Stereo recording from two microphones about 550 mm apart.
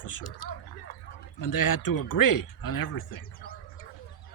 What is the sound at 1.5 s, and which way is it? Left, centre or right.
Speech, left.